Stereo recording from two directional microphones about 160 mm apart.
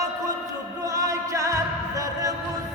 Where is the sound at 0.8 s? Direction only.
20° right (ahead or behind).